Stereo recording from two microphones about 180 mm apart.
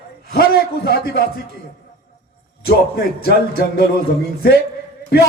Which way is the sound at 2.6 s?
60° left (ahead or behind).